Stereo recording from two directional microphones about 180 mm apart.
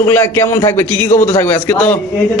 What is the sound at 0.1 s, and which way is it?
A man's voice, 10° left (ahead or behind).